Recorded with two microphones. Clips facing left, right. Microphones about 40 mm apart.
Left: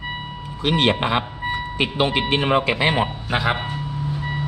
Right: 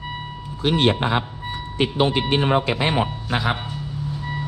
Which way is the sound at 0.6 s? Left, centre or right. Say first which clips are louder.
Even; left.